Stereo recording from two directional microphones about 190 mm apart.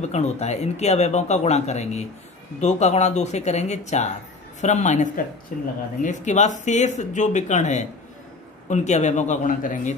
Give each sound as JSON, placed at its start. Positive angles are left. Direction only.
{"t": 0.1, "sound": "speech", "side_deg": 35}